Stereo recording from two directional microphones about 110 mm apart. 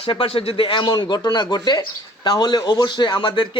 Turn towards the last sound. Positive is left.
turn(degrees=45)  # may be behind; listen again after turning